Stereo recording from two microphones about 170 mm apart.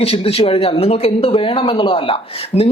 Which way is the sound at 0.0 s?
35° left (ahead or behind).